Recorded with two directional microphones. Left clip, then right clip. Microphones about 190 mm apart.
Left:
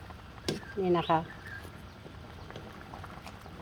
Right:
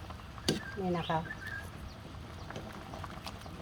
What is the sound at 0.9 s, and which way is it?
Speech, 50° left (ahead or behind).